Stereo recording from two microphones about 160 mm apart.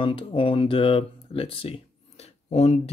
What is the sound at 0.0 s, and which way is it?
Speech, 30° left (ahead or behind).